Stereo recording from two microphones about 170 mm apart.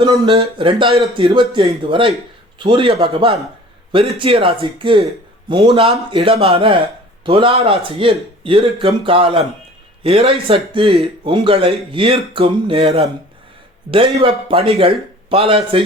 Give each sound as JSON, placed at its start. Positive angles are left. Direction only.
{"t": 0.0, "sound": "a man's voice", "side_deg": -30}
{"t": 13.9, "sound": "speech", "side_deg": -30}